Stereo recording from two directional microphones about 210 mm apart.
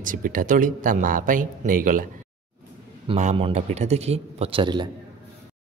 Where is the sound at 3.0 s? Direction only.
35° right (ahead or behind).